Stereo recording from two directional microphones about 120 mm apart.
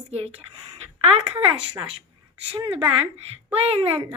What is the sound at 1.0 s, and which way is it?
A woman's voice, 55° right (ahead or behind).